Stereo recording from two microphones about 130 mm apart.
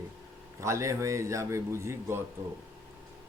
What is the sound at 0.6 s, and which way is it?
A man's voice, 25° right (ahead or behind).